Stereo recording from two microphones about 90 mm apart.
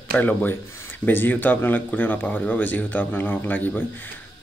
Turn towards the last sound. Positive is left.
turn(degrees=20)  # may be behind; listen again after turning